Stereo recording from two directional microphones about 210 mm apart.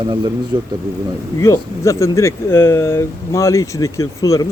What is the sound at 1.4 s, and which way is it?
Speech, 15° left (ahead or behind).